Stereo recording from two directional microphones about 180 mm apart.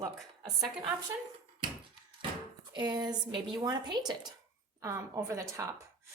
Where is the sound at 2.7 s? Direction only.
25° right (ahead or behind).